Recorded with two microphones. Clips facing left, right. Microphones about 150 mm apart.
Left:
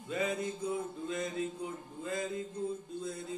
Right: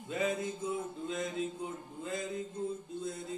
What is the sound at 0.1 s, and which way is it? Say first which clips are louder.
Mantra: even; 25° right (ahead or behind).